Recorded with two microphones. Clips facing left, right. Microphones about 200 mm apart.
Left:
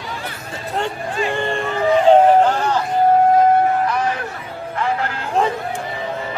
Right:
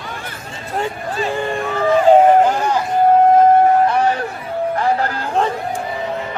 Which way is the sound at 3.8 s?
30° right (ahead or behind).